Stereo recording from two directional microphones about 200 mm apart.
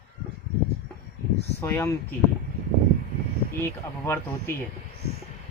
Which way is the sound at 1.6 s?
10° left (ahead or behind).